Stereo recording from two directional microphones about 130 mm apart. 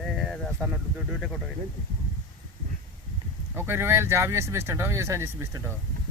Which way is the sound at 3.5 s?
20° right (ahead or behind).